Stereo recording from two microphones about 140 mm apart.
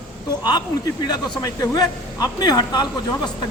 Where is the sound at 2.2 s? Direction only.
25° left (ahead or behind).